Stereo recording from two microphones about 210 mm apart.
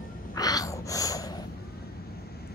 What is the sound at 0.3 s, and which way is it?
Gasp, 15° left (ahead or behind).